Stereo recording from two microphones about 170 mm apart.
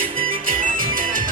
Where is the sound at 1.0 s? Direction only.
55° right (ahead or behind).